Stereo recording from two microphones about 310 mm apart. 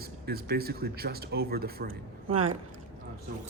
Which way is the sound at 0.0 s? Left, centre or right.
Right.